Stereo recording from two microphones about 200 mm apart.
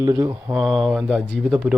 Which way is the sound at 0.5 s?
Centre (ahead or behind).